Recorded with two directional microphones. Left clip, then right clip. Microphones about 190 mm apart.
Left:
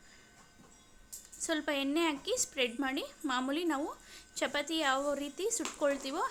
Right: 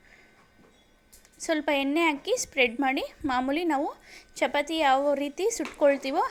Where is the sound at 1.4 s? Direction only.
15° right (ahead or behind).